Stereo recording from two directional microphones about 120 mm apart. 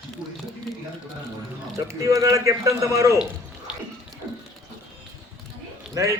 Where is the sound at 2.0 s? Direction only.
25° right (ahead or behind).